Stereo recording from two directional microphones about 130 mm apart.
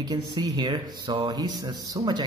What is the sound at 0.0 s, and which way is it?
Speech, 30° right (ahead or behind).